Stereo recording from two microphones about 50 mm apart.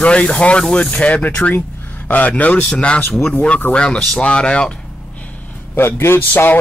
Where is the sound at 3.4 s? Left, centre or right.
Left.